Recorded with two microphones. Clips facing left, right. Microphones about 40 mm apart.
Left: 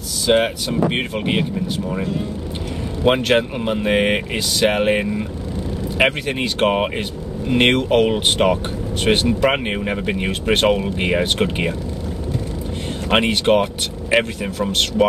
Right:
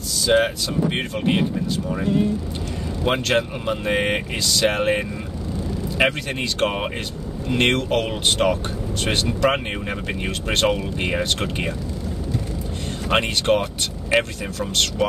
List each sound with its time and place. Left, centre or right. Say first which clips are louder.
0.3 s speech: left 2 dB; left
3.1 s speech: left 5 dB; left
13.1 s speech: left 4 dB; left